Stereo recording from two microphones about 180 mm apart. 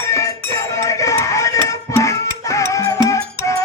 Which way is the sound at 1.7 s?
15° left (ahead or behind).